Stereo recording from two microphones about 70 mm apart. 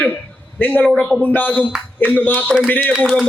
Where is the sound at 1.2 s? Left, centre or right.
Left.